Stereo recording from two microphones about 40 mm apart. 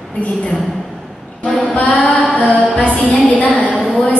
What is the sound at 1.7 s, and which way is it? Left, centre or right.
Speech, left.